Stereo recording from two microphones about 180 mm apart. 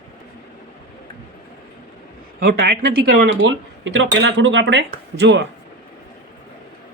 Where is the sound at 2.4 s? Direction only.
60° right (ahead or behind).